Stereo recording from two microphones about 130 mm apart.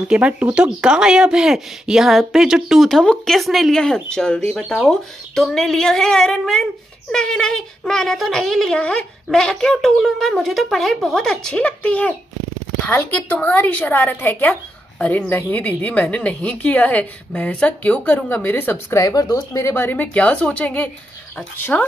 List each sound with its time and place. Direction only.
0.1 s a woman's voice: 10° right (ahead or behind); by 18.9 s 15° left (ahead or behind)
18.9 s speech: 30° left (ahead or behind)
19.7 s a woman's voice: 15° left (ahead or behind)